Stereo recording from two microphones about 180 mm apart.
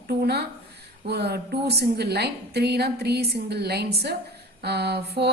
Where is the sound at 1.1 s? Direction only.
65° right (ahead or behind).